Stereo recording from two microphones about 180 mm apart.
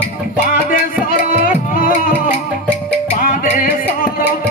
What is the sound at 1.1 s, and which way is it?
Music, 50° left (ahead or behind).